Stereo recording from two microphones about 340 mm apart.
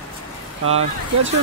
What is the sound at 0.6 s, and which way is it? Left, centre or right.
Speech, right.